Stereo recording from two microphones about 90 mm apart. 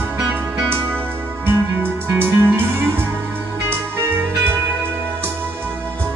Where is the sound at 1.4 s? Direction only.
25° right (ahead or behind).